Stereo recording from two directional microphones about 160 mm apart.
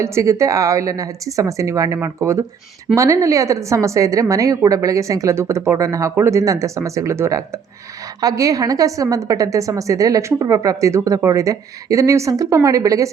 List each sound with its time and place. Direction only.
0.0 s a woman's voice: 20° right (ahead or behind)